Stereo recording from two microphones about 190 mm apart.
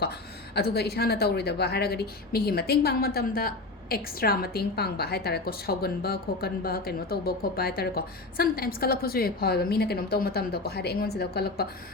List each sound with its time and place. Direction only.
0.5 s a woman's voice: 60° left (ahead or behind)